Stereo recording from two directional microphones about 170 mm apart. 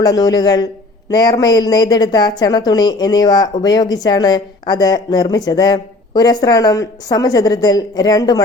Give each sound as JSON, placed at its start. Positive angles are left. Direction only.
{"t": 0.0, "sound": "a woman's voice", "side_deg": 20}